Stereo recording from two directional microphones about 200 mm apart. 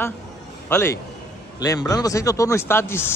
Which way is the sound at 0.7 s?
15° left (ahead or behind).